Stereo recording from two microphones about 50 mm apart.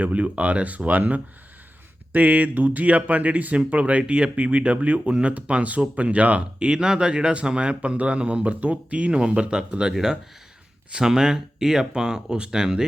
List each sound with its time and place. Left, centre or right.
0.0 s speech: right; by 12.8 s centre